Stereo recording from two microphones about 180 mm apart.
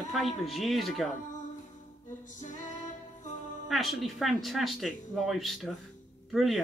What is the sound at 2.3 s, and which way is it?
Music, 45° left (ahead or behind).